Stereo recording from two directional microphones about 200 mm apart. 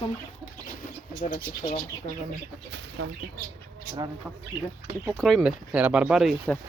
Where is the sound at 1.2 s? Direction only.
35° left (ahead or behind).